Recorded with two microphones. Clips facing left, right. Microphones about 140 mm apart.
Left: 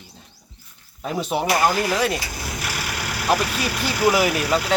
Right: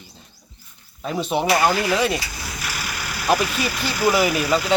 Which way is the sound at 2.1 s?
55° left (ahead or behind).